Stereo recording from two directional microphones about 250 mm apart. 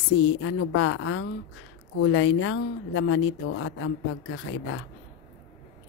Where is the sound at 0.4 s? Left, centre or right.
Left.